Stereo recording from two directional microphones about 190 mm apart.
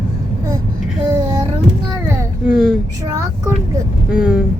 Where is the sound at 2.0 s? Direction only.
5° right (ahead or behind).